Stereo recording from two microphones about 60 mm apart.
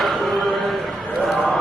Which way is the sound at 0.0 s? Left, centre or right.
Centre.